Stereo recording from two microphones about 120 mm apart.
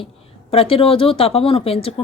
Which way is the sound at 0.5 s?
50° left (ahead or behind).